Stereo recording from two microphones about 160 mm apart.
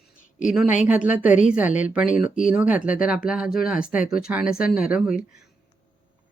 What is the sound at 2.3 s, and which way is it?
Speech, 55° left (ahead or behind).